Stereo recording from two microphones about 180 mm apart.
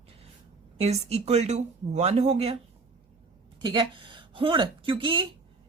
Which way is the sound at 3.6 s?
25° right (ahead or behind).